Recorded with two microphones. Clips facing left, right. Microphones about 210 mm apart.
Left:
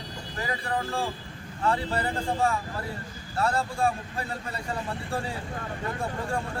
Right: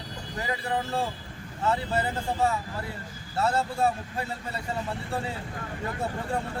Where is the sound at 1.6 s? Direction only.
25° right (ahead or behind).